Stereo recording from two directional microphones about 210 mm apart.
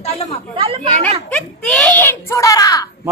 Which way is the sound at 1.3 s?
5° left (ahead or behind).